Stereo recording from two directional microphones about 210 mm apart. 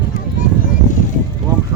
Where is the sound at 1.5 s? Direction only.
15° right (ahead or behind).